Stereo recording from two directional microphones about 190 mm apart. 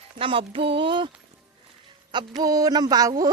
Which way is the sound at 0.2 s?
30° right (ahead or behind).